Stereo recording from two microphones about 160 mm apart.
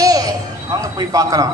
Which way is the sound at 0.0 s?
25° right (ahead or behind).